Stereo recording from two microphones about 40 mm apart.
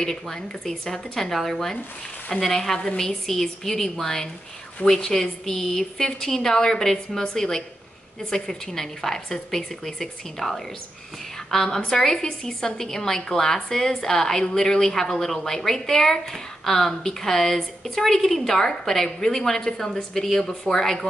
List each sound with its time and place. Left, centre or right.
0.0 s a woman's voice: centre